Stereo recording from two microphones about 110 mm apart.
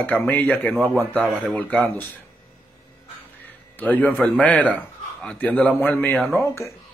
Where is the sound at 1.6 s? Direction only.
15° left (ahead or behind).